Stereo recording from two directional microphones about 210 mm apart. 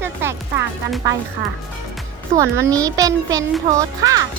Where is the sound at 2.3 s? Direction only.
15° right (ahead or behind).